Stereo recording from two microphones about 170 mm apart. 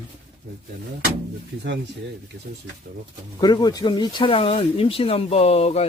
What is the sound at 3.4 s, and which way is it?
Speech, 25° left (ahead or behind).